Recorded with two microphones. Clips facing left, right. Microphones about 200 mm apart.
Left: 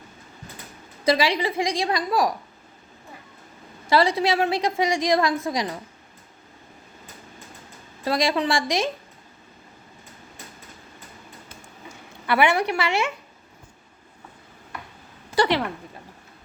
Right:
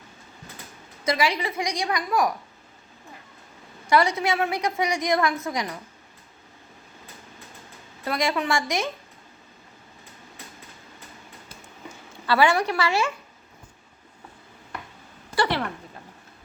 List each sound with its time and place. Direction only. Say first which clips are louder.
1.0 s a woman's voice: left 3 dB; 30° left (ahead or behind)
3.8 s a woman's voice: left 2 dB; 30° left (ahead or behind)
8.0 s a woman's voice: left 3 dB; 30° left (ahead or behind)
12.2 s a woman's voice: even; 20° left (ahead or behind)
15.4 s a woman's voice: left 4 dB; 20° left (ahead or behind)